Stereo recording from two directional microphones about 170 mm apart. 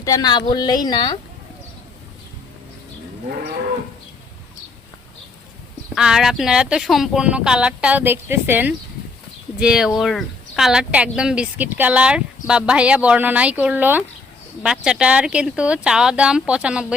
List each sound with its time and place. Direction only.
0.0 s a woman's voice: 20° left (ahead or behind)
5.9 s a woman's voice: 5° right (ahead or behind)